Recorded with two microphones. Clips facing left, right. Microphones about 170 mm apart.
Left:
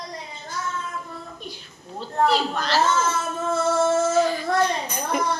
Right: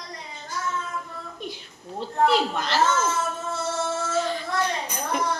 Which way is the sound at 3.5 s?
45° left (ahead or behind).